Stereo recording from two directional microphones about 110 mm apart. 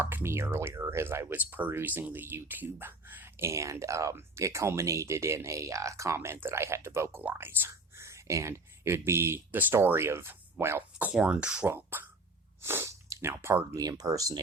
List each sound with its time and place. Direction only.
0.0 s speech: 20° right (ahead or behind)
11.1 s speech: 10° right (ahead or behind); by 14.4 s 30° right (ahead or behind)